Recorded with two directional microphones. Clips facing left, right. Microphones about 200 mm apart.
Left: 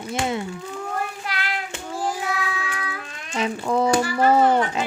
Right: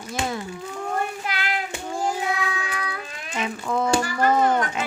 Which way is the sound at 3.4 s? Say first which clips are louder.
Left 4 dB; 35° left (ahead or behind).